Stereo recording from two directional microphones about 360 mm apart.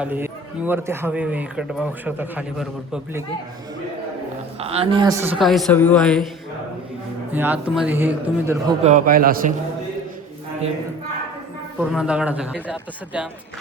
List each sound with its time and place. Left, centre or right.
0.0 s a man's voice: centre
4.6 s a man's voice: centre
7.3 s a man's voice: centre
8.8 s a man's voice: centre
11.8 s a man's voice: centre